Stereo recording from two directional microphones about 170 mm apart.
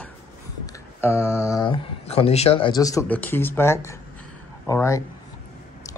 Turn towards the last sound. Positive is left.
turn(degrees=20)  # may be behind; listen again after turning